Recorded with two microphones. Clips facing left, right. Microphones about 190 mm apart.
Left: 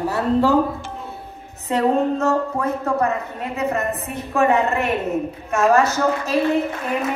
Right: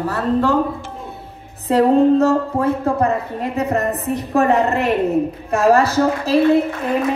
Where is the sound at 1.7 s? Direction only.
35° right (ahead or behind).